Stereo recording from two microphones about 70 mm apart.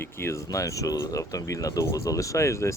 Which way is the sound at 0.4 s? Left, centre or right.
Left.